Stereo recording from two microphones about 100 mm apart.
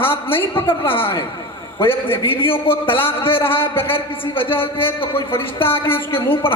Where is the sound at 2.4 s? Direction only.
65° left (ahead or behind).